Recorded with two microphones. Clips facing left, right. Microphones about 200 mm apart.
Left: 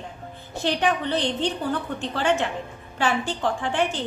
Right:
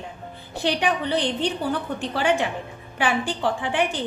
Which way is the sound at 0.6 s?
15° right (ahead or behind).